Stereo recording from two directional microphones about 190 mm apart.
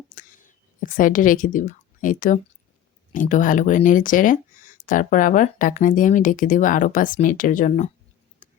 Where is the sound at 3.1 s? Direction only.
45° left (ahead or behind).